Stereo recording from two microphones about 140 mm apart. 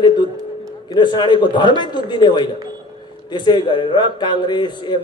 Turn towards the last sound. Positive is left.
turn(degrees=30)  # may be behind; listen again after turning